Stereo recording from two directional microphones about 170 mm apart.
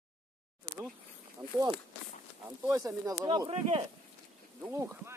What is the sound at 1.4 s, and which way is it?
Speech, 25° right (ahead or behind).